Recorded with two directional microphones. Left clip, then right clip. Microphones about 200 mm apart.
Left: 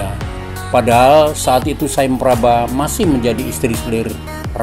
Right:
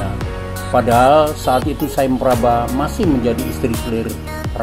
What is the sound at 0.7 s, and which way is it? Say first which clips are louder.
Speech: left 2 dB; 20° left (ahead or behind).